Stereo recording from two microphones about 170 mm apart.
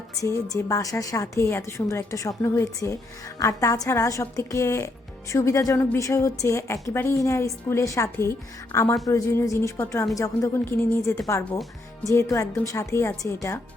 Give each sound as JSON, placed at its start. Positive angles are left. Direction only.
{"t": 0.2, "sound": "a woman's voice", "side_deg": 20}